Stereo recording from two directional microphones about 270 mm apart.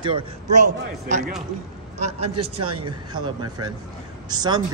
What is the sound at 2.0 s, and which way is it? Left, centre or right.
Speech, right.